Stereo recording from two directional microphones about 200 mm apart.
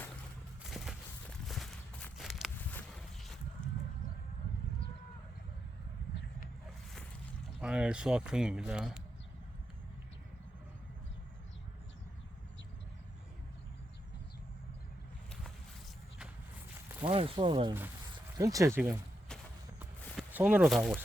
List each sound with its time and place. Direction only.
0.6 s a sound: centre (ahead or behind)
7.6 s speech: 5° right (ahead or behind)
17.0 s speech: 30° right (ahead or behind)
20.1 s speech: 5° right (ahead or behind)